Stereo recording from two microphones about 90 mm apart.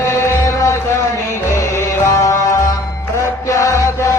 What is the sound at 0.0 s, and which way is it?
Music, 30° left (ahead or behind).